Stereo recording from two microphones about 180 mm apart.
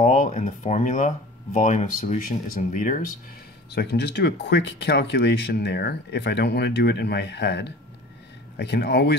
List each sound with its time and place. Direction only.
0.0 s speech: 45° left (ahead or behind)
3.7 s speech: 65° left (ahead or behind)